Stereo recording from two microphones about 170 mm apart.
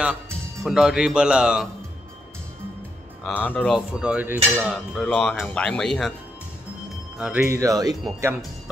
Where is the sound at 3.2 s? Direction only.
10° left (ahead or behind).